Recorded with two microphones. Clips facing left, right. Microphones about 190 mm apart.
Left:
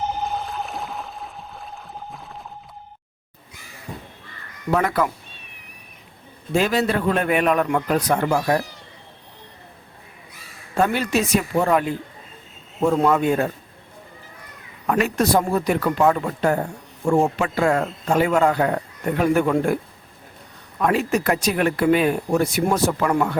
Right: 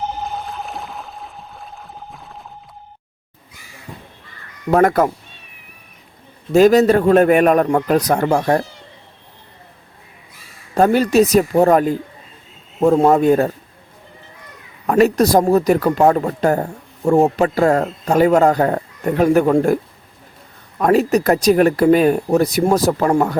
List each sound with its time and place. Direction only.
0.2 s a sound: centre (ahead or behind)
4.7 s a man's voice: 45° right (ahead or behind)
6.5 s a man's voice: 40° right (ahead or behind)
10.8 s speech: 40° right (ahead or behind)
14.8 s speech: 40° right (ahead or behind)